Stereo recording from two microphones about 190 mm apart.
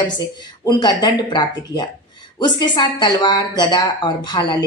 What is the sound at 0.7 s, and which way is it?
Speech, 20° left (ahead or behind).